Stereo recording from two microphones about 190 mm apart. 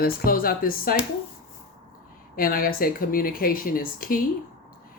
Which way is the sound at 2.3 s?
50° left (ahead or behind).